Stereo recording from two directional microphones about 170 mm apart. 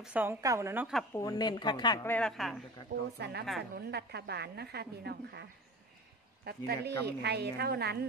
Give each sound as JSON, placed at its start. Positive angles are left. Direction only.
{"t": 0.0, "sound": "a woman's voice", "side_deg": -10}
{"t": 1.1, "sound": "a woman's voice", "side_deg": 20}
{"t": 2.0, "sound": "a woman's voice", "side_deg": 5}
{"t": 3.2, "sound": "a woman's voice", "side_deg": -70}